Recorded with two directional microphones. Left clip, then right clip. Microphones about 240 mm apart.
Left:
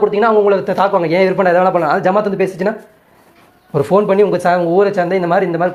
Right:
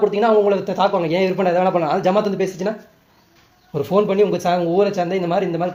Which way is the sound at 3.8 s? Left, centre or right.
Centre.